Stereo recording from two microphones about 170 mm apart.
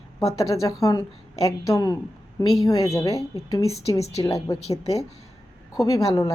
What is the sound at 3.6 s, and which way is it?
Speech, 40° left (ahead or behind).